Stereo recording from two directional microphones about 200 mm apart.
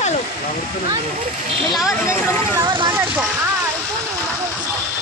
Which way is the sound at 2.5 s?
20° right (ahead or behind).